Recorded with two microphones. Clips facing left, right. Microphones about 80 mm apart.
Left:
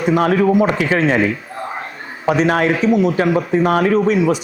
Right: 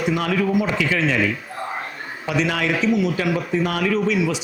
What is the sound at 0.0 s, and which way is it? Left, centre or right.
Speech, left.